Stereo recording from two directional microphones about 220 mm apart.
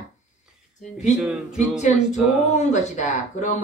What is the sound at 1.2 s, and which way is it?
Music, centre (ahead or behind).